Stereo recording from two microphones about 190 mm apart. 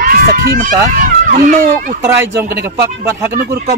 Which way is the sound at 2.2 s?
60° right (ahead or behind).